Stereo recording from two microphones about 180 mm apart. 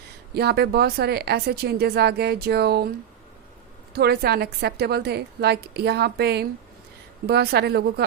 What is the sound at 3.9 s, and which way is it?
A woman's voice, 60° right (ahead or behind).